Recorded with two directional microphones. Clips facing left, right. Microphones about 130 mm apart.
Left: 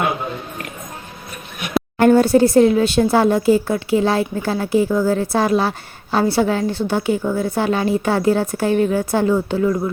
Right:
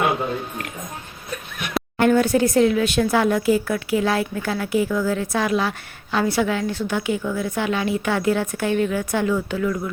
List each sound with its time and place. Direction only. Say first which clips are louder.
2.0 s speech: left 5 dB; 35° left (ahead or behind)